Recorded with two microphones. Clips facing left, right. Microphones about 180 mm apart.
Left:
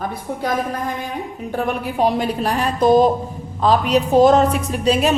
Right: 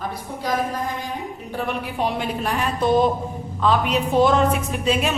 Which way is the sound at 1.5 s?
45° left (ahead or behind).